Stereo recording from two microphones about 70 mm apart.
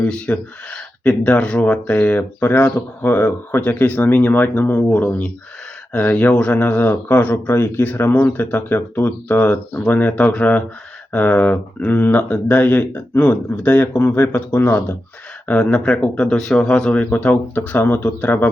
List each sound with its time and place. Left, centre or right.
0.0 s speech: centre
5.9 s speech: centre